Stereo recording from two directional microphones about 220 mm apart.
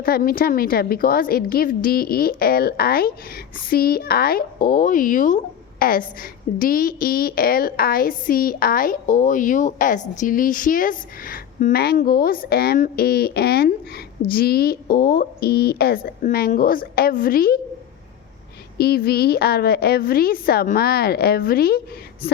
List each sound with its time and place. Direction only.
0.0 s a woman's voice: 40° left (ahead or behind)
18.8 s a woman's voice: 45° left (ahead or behind)